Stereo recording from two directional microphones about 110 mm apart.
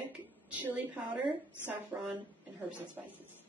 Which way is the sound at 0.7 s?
15° right (ahead or behind).